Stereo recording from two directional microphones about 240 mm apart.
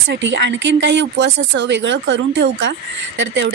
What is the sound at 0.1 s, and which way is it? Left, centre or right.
A woman's voice, right.